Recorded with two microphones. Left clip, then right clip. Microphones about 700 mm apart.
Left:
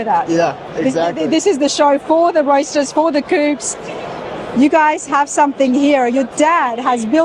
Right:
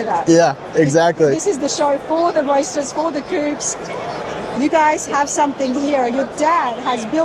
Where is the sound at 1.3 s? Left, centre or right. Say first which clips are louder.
Left 4 dB; left.